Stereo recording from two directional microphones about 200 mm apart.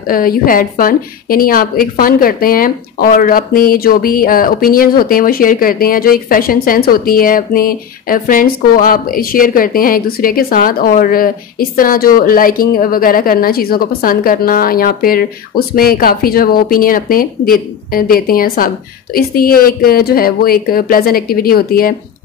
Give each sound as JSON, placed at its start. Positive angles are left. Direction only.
{"t": 0.1, "sound": "a woman's voice", "side_deg": 45}